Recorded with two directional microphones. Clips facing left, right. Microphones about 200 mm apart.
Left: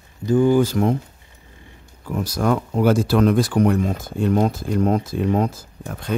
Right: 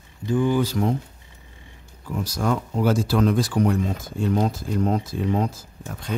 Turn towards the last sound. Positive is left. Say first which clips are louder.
# left 3 dB
turn(degrees=55)  # may be behind; listen again after turning